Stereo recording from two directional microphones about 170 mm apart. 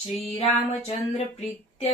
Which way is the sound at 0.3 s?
35° left (ahead or behind).